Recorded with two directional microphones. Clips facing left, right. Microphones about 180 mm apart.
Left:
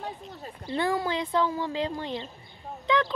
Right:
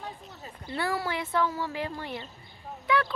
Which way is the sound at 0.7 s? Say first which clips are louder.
Left 3 dB; 20° left (ahead or behind).